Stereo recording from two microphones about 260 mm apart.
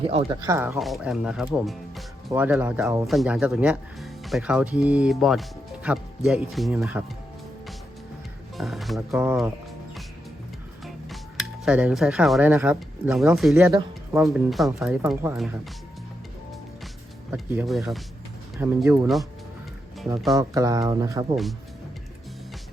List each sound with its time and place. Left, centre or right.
0.0 s speech: right
0.8 s speech: centre
8.5 s speech: centre
11.6 s a woman's voice: centre
17.3 s speech: centre
20.3 s speech: centre